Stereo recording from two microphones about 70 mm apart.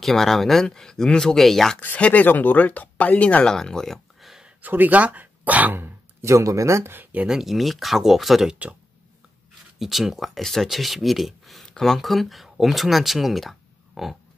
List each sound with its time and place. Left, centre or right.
0.0 s speech: centre
1.8 s speech: left
3.5 s a sound: centre
4.6 s speech: right
6.3 s speech: right
7.0 s speech: right
7.2 s speech: centre
9.8 s speech: centre